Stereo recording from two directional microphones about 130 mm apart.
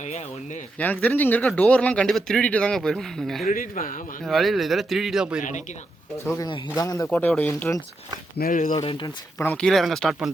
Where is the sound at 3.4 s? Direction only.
90° left.